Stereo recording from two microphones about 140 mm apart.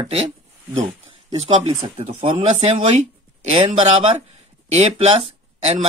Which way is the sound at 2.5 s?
55° right (ahead or behind).